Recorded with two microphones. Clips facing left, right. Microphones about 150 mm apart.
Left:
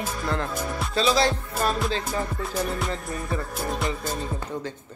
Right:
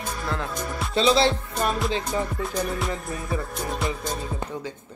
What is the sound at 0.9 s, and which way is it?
Speech, 25° right (ahead or behind).